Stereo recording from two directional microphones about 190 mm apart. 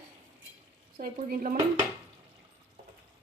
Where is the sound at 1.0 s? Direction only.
45° right (ahead or behind).